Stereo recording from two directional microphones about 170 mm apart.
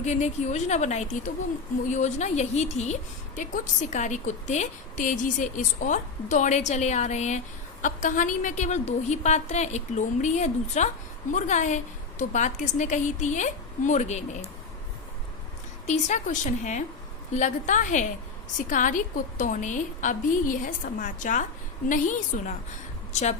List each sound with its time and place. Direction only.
0.0 s a woman's voice: 45° left (ahead or behind)
15.9 s a woman's voice: 45° left (ahead or behind)